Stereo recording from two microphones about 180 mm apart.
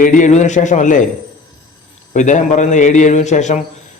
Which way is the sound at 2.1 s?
45° left (ahead or behind).